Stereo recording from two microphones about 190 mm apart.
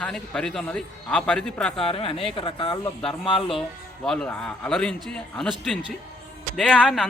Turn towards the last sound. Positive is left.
turn(degrees=5)  # may be behind; listen again after turning